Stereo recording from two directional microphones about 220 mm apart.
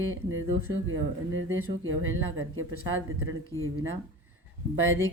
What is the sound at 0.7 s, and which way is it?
Speech, 65° right (ahead or behind).